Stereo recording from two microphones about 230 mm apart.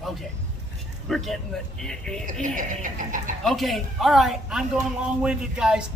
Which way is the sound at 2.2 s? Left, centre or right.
Right.